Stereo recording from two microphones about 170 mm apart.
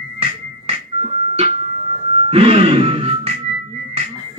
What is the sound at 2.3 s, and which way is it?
Music, 35° right (ahead or behind).